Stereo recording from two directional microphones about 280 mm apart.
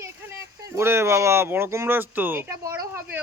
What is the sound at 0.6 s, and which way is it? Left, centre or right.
Speech, centre.